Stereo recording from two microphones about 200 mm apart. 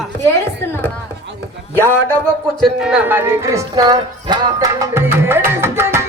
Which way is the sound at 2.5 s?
Centre (ahead or behind).